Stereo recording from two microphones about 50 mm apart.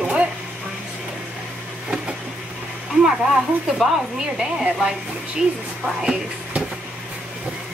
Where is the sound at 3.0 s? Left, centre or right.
Centre.